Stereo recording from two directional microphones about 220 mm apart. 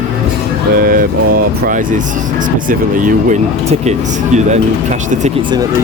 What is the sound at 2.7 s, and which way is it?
Speech, 35° right (ahead or behind).